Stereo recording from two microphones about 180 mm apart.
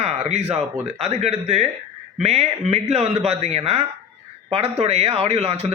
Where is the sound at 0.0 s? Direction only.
35° right (ahead or behind).